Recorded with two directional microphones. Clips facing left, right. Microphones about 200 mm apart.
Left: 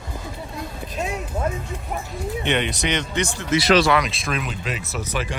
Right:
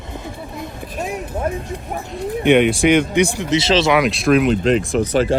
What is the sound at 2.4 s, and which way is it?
Speech, 10° right (ahead or behind).